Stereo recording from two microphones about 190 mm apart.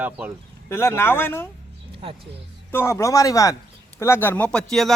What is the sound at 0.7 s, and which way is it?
Speech, 15° left (ahead or behind).